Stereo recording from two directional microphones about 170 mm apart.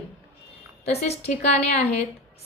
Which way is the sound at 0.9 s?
40° left (ahead or behind).